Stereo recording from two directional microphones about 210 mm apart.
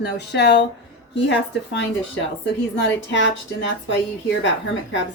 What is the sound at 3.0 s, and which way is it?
Speech, 60° left (ahead or behind).